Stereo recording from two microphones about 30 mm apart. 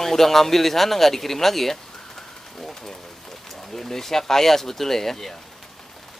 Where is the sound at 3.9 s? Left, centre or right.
Centre.